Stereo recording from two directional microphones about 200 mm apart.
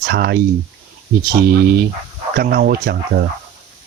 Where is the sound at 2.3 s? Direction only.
50° right (ahead or behind).